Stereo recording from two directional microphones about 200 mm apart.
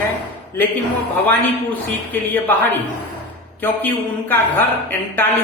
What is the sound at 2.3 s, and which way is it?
Speech, 10° left (ahead or behind).